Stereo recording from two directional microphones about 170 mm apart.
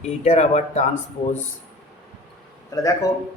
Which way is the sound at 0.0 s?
40° left (ahead or behind).